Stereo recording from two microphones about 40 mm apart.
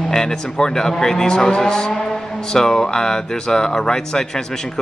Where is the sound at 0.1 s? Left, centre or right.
Centre.